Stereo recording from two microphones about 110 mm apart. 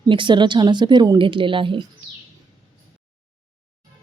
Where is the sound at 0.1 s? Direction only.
45° right (ahead or behind).